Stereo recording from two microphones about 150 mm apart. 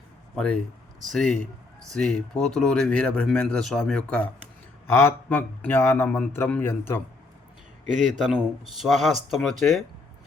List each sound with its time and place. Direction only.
0.3 s a man's voice: 5° left (ahead or behind)
7.9 s a man's voice: 55° right (ahead or behind)
8.7 s speech: centre (ahead or behind)